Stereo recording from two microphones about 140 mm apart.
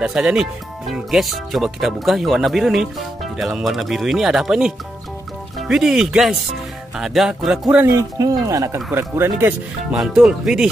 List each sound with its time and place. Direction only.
0.0 s speech: 5° right (ahead or behind)
7.8 s speech: 25° right (ahead or behind)
9.9 s speech: 5° right (ahead or behind)